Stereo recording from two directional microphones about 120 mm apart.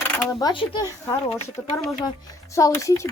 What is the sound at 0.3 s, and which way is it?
Speech, 35° left (ahead or behind).